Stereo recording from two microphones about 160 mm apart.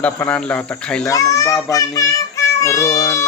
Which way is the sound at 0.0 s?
10° left (ahead or behind).